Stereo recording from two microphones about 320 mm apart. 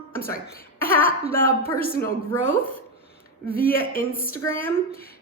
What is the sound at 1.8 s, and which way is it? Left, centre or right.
Speech, left.